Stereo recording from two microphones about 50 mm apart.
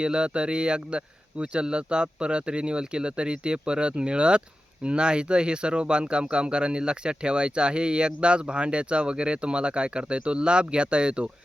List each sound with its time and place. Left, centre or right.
0.0 s speech: centre